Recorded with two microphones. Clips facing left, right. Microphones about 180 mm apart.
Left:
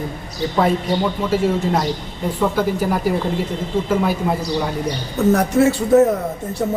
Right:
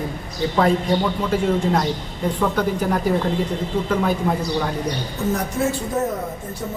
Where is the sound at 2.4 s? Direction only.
5° left (ahead or behind).